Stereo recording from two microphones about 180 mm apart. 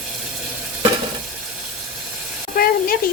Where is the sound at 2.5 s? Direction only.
55° left (ahead or behind).